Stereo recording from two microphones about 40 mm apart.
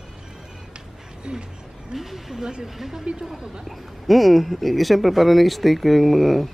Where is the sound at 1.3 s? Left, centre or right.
Right.